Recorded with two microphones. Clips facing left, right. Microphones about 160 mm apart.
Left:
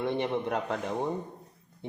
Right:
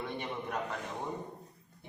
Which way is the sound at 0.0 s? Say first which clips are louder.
Left 9 dB; 75° left (ahead or behind).